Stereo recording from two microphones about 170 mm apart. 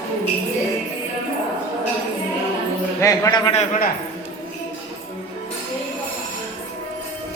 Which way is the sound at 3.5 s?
50° left (ahead or behind).